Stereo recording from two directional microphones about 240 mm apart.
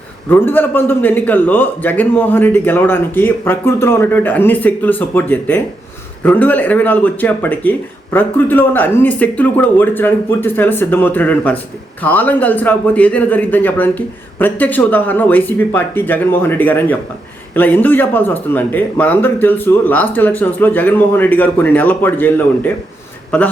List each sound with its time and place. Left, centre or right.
0.3 s a man's voice: centre